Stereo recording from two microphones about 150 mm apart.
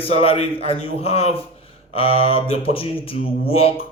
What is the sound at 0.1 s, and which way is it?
Speech, 40° left (ahead or behind).